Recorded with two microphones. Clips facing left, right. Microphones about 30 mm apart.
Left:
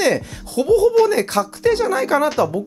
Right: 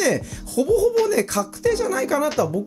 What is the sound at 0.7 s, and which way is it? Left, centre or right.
Speech, left.